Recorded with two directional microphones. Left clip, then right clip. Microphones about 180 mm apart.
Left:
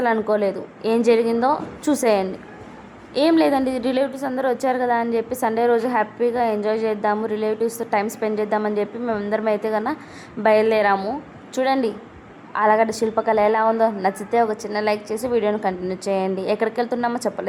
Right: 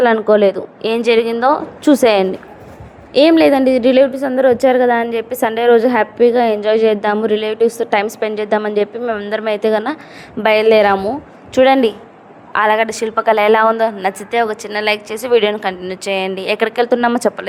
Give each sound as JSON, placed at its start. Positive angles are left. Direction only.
{"t": 0.0, "sound": "a woman's voice", "side_deg": -25}
{"t": 10.9, "sound": "a woman's voice", "side_deg": -15}
{"t": 11.5, "sound": "a woman's voice", "side_deg": -25}